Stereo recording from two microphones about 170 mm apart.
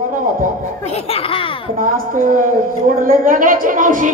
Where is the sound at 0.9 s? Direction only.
35° left (ahead or behind).